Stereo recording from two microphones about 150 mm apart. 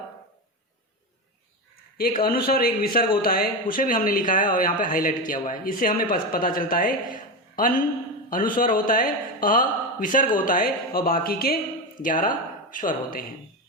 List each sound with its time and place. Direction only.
2.0 s speech: 75° left (ahead or behind)
11.9 s speech: 60° left (ahead or behind)